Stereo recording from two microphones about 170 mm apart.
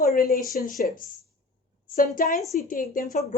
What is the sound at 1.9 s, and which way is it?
Speech, 60° left (ahead or behind).